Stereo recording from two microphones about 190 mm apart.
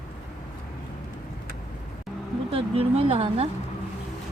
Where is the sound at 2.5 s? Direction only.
30° right (ahead or behind).